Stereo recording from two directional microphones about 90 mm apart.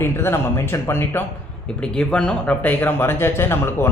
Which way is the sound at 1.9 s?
10° left (ahead or behind).